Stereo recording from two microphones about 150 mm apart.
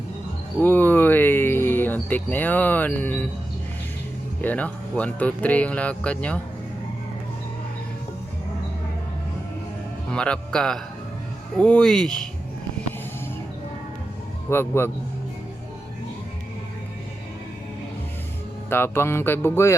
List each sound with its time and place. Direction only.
0.6 s insect: 10° left (ahead or behind)
4.4 s speech: 10° left (ahead or behind)
10.1 s a man's voice: 5° left (ahead or behind)
14.5 s speech: 15° left (ahead or behind)
18.7 s speech: 15° left (ahead or behind)